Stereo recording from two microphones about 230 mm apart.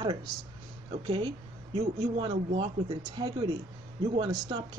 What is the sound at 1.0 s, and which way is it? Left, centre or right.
Speech, right.